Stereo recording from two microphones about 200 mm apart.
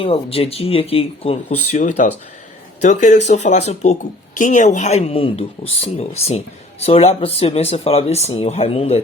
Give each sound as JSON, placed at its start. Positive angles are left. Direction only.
{"t": 0.0, "sound": "speech", "side_deg": 30}